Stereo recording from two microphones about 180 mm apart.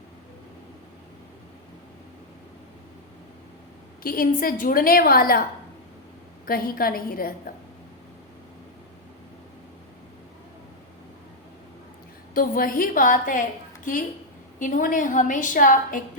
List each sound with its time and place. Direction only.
4.0 s a woman's voice: 50° left (ahead or behind)
6.4 s a woman's voice: 55° left (ahead or behind)
12.3 s a woman's voice: 50° left (ahead or behind)